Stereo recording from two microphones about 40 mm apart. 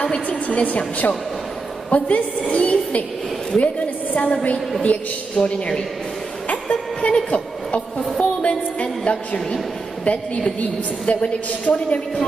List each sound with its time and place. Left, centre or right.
0.0 s a woman's voice: left
2.5 s a sound: left
3.5 s a woman's voice: left
9.1 s a woman's voice: left
10.6 s a woman's voice: left